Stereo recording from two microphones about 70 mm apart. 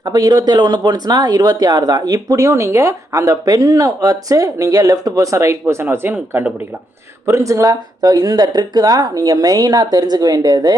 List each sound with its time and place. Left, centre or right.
0.0 s speech: right
7.3 s speech: right
9.0 s speech: right